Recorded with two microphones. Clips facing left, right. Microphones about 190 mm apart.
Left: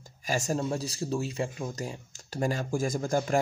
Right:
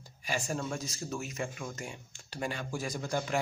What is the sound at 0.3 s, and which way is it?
Speech, 40° left (ahead or behind).